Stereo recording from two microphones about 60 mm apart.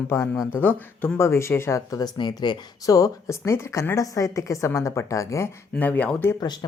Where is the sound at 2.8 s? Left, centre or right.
Left.